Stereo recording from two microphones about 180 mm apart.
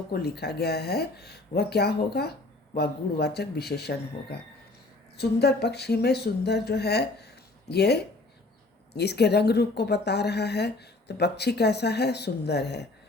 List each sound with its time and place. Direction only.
0.1 s speech: 65° left (ahead or behind)